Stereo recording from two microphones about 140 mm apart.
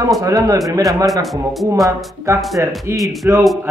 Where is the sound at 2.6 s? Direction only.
15° right (ahead or behind).